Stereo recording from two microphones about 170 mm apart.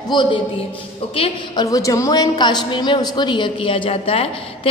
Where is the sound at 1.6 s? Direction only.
20° left (ahead or behind); by 4.7 s 35° left (ahead or behind).